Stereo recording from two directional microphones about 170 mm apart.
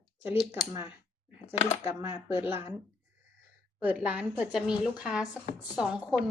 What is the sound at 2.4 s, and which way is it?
Speech, 15° right (ahead or behind).